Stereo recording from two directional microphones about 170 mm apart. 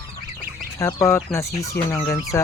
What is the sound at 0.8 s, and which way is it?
Speech, 15° left (ahead or behind).